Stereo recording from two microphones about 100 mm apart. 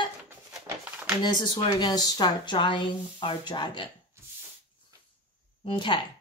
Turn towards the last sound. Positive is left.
turn(degrees=55)  # may be behind; listen again after turning